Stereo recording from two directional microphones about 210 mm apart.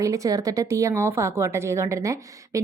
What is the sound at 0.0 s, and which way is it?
A woman's voice, 15° right (ahead or behind).